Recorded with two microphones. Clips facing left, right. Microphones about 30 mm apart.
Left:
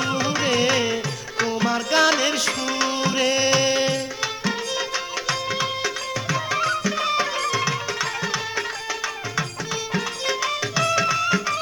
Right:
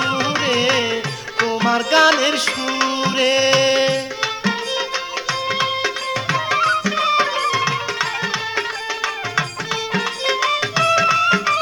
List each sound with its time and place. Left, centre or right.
0.0 s carnatic music: right
1.4 s music: right
9.9 s music: right